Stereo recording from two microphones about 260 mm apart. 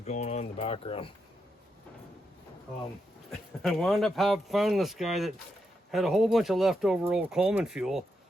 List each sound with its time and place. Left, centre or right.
0.0 s speech: left
3.6 s speech: centre